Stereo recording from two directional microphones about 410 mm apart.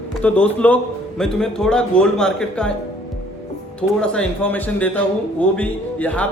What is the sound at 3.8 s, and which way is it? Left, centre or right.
Speech, centre.